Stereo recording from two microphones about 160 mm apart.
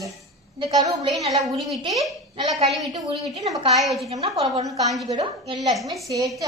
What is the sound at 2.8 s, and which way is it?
Speech, 20° right (ahead or behind).